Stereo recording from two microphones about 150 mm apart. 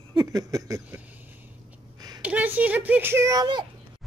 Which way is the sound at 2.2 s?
10° right (ahead or behind).